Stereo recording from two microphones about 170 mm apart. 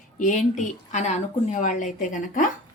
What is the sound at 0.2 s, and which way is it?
Speech, 50° left (ahead or behind).